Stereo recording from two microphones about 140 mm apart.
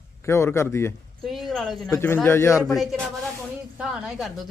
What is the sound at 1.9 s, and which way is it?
Speech, 15° left (ahead or behind).